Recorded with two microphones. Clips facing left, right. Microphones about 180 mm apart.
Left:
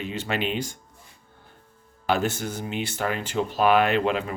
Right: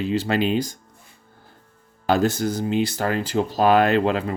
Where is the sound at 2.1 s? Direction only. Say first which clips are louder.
Right 5 dB; 40° right (ahead or behind).